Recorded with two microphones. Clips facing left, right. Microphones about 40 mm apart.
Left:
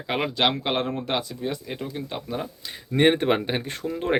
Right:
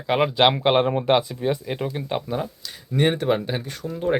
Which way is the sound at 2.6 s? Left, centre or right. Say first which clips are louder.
Left 3 dB; left.